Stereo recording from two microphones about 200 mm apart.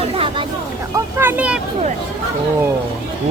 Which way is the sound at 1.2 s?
10° right (ahead or behind).